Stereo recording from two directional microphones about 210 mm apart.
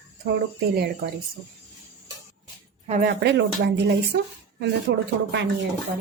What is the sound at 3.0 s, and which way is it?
Speech, 55° right (ahead or behind).